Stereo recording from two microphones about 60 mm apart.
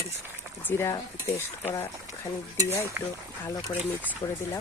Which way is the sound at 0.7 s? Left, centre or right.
Left.